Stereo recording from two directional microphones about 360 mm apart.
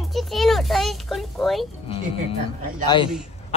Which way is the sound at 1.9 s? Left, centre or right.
Centre.